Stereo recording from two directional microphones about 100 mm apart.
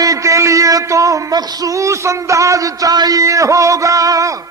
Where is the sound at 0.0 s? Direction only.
35° right (ahead or behind).